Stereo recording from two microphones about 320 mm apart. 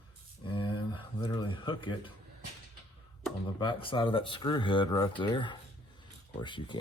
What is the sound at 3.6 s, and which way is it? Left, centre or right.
Speech, centre.